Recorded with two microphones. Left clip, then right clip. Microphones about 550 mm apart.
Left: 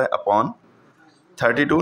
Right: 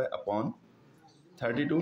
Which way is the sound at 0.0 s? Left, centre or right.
Right.